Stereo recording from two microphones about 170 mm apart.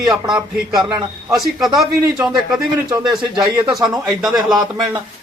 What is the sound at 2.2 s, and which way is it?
Speech, centre (ahead or behind).